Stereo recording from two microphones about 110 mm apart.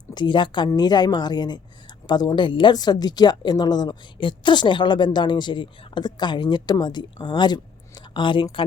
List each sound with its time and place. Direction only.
0.1 s a woman's voice: 45° left (ahead or behind)